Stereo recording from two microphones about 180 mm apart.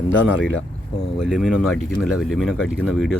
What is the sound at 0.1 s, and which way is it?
Speech, 90° left.